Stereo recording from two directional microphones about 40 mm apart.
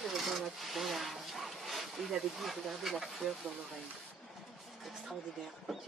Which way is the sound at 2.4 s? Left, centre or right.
Centre.